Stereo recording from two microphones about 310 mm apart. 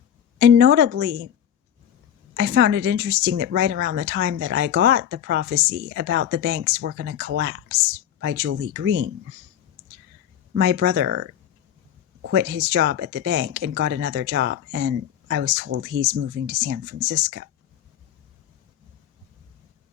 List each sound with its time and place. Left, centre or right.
0.3 s speech: right
2.3 s speech: right
10.5 s speech: right